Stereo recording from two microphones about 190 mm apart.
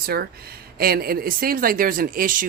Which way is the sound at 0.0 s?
55° right (ahead or behind).